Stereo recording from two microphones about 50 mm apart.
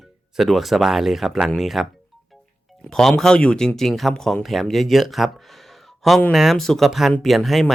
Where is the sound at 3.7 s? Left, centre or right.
Centre.